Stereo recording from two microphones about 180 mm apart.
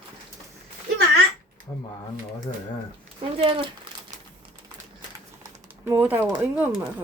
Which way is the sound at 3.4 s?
30° right (ahead or behind).